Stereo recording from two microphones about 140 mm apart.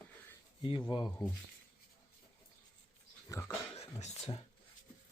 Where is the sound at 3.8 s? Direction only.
50° left (ahead or behind).